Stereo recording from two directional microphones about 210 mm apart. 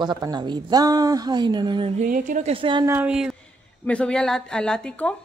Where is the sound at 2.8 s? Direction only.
10° right (ahead or behind).